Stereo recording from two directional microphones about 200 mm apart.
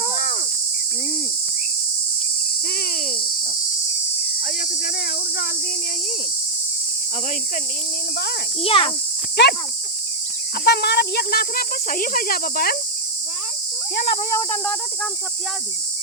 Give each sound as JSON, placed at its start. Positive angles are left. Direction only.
{"t": 2.6, "sound": "cricket", "side_deg": 50}
{"t": 4.4, "sound": "speech", "side_deg": 50}
{"t": 8.6, "sound": "speech", "side_deg": 30}
{"t": 9.4, "sound": "speech", "side_deg": 55}
{"t": 10.6, "sound": "speech", "side_deg": 55}
{"t": 14.3, "sound": "cricket", "side_deg": 10}